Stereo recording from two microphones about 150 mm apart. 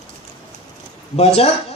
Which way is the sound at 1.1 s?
45° left (ahead or behind).